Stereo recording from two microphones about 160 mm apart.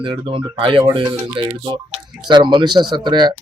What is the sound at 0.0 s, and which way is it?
Speech, 35° right (ahead or behind).